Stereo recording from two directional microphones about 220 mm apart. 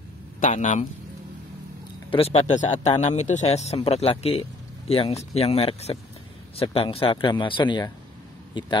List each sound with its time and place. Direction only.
0.4 s speech: 35° left (ahead or behind)
2.0 s speech: 25° left (ahead or behind)